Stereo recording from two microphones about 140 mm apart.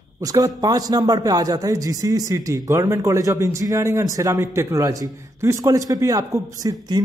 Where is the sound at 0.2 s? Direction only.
25° right (ahead or behind).